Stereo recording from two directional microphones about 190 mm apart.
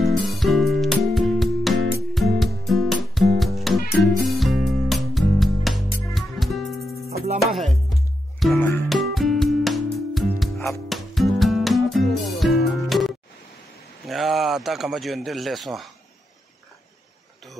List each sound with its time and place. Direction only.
0.0 s music: centre (ahead or behind)
6.8 s music: 15° left (ahead or behind)
8.4 s music: 5° left (ahead or behind)
14.0 s a sound: centre (ahead or behind)